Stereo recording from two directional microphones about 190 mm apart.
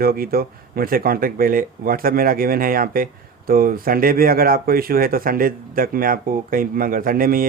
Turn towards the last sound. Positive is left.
turn(degrees=-50)  # may be behind; listen again after turning